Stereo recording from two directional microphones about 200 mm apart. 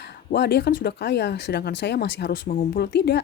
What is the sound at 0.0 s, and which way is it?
Speech, 55° left (ahead or behind).